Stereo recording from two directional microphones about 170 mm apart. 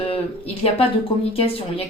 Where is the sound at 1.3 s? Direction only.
35° left (ahead or behind).